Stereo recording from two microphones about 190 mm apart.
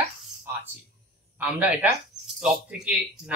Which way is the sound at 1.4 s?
5° right (ahead or behind).